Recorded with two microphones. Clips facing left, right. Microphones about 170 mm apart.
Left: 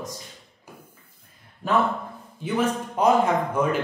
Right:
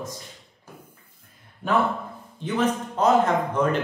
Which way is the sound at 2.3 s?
10° left (ahead or behind).